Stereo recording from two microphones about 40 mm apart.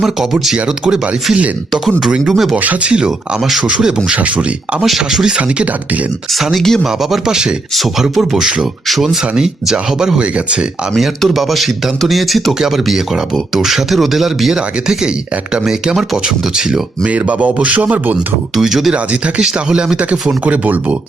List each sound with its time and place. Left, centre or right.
0.0 s speech: centre
2.3 s speech: centre
2.8 s speech: right
4.8 s speech: centre
6.6 s speech: centre
7.3 s speech: centre
8.1 s speech: centre
8.4 s speech: right
10.9 s speech: centre
14.5 s speech: centre
17.1 s speech: right
18.5 s speech: centre
20.4 s speech: right